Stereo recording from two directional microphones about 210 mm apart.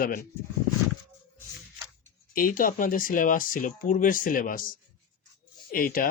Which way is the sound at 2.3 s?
40° left (ahead or behind).